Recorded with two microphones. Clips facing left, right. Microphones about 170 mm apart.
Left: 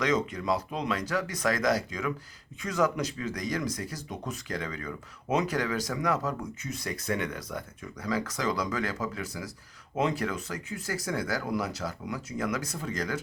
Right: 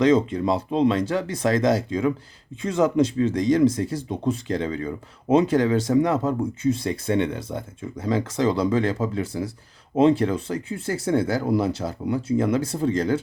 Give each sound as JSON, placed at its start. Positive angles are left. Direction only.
{"t": 0.0, "sound": "speech", "side_deg": -30}